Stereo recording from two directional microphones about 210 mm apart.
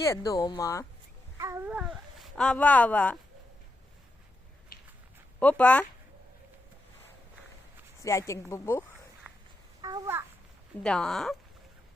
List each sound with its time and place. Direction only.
0.0 s a woman's voice: 15° left (ahead or behind)
1.4 s speech: 10° right (ahead or behind); by 3.2 s 5° left (ahead or behind)
5.4 s a woman's voice: 5° left (ahead or behind)
8.0 s a woman's voice: 15° left (ahead or behind)
9.8 s babbling: 15° right (ahead or behind)
10.8 s speech: 5° left (ahead or behind)